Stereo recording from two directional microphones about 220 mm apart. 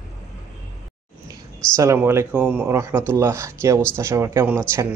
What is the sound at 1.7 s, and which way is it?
Speech, 10° right (ahead or behind).